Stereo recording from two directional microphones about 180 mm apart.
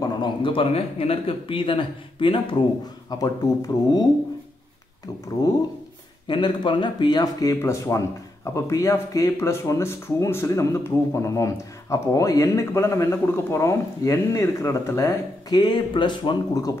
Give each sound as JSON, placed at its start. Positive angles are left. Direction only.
{"t": 0.0, "sound": "speech", "side_deg": 25}
{"t": 6.2, "sound": "speech", "side_deg": 25}